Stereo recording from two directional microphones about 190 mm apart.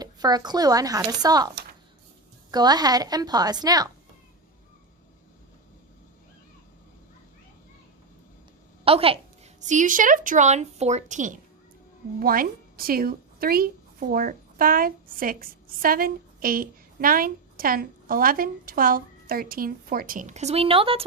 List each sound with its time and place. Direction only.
0.0 s speech: 20° right (ahead or behind)
2.5 s speech: 20° right (ahead or behind)
8.8 s a woman's voice: 30° right (ahead or behind)